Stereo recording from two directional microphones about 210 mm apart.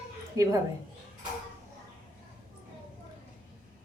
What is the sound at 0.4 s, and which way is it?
Speech, 15° right (ahead or behind).